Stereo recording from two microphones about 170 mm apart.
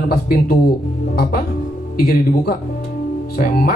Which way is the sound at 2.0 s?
65° left (ahead or behind).